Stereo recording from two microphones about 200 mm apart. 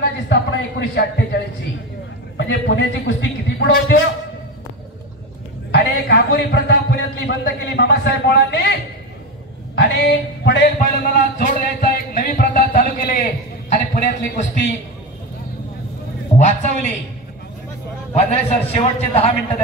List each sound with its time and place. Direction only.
0.3 s a man's voice: 60° left (ahead or behind)
5.7 s a sound: 55° left (ahead or behind)
7.2 s a man's voice: 55° left (ahead or behind)
9.8 s a sound: 60° left (ahead or behind)
10.8 s music: 45° left (ahead or behind)
16.3 s a man's voice: 35° left (ahead or behind)
18.1 s a man's voice: 35° left (ahead or behind)